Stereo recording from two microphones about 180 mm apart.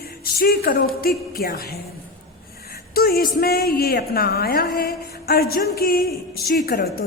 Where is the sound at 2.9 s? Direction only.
55° left (ahead or behind).